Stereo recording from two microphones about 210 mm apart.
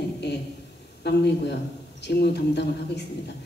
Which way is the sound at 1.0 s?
50° left (ahead or behind).